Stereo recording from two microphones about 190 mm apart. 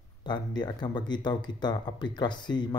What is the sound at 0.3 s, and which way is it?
Speech, 20° left (ahead or behind).